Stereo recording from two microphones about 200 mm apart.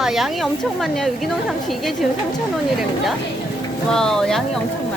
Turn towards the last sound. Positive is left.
turn(degrees=0)  # may be behind; listen again after turning